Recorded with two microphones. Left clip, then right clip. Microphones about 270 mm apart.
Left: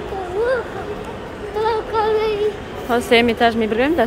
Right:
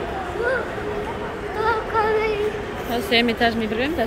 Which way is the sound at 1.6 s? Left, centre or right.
Left.